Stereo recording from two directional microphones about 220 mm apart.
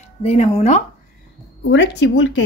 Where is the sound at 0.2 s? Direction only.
30° left (ahead or behind).